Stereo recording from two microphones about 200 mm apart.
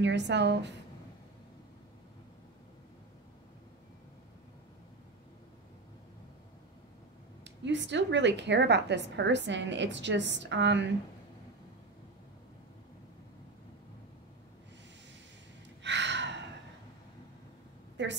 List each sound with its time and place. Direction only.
0.0 s a woman's voice: 60° right (ahead or behind)
7.4 s a woman's voice: 65° right (ahead or behind)
15.8 s a sound: 65° right (ahead or behind)
18.0 s a woman's voice: 60° right (ahead or behind)